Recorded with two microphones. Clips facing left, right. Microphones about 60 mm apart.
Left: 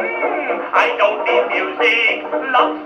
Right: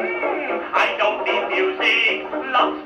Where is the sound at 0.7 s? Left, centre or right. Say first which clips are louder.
Left 5 dB; left.